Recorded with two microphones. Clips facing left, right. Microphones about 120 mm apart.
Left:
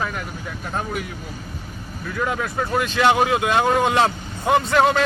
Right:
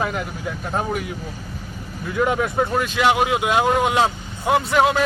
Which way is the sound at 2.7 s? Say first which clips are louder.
Left 5 dB; 10° right (ahead or behind).